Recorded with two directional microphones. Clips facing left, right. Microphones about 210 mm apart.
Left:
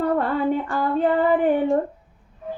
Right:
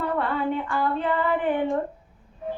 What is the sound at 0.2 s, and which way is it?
Female singing, 40° left (ahead or behind).